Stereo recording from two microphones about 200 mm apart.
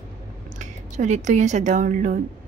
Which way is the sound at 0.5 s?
35° right (ahead or behind).